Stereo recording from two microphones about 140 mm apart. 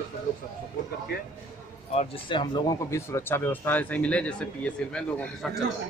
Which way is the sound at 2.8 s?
20° left (ahead or behind).